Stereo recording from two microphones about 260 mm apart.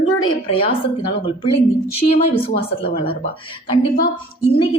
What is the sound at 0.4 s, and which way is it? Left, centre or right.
Speech, left.